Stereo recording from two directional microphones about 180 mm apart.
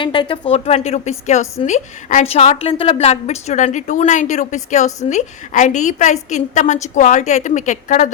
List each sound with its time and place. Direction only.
0.0 s a woman's voice: 25° left (ahead or behind); by 8.1 s 45° left (ahead or behind)